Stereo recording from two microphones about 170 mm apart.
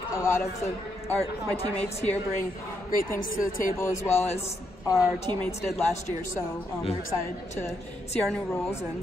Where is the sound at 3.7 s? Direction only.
15° left (ahead or behind).